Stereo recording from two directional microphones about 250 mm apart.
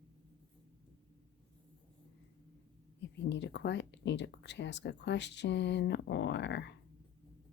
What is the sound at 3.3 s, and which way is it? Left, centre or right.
Speech, left.